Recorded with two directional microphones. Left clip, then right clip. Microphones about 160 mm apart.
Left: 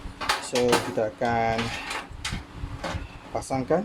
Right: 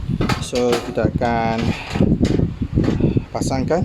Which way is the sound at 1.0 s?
50° right (ahead or behind).